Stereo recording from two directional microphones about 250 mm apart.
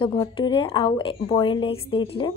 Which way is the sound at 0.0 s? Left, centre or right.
Centre.